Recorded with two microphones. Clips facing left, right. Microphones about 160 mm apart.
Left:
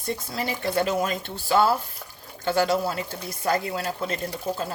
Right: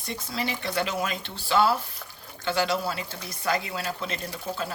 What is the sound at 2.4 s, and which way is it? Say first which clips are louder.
Speech: left 4 dB; 45° left (ahead or behind).